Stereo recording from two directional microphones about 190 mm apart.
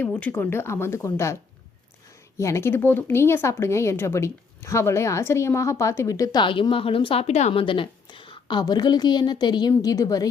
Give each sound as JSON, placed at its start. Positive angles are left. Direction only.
{"t": 0.0, "sound": "speech", "side_deg": 10}
{"t": 2.4, "sound": "speech", "side_deg": 15}